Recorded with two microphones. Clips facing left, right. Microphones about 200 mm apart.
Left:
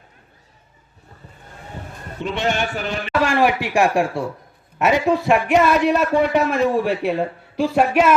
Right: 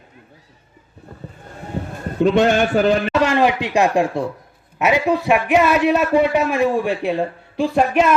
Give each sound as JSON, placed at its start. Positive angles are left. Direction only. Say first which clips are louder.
{"t": 2.1, "sound": "a man's voice", "louder": "right 8 dB", "side_deg": -45}
{"t": 3.1, "sound": "speech", "louder": "right 2 dB", "side_deg": -20}
{"t": 4.9, "sound": "a man's voice", "louder": "even", "side_deg": 0}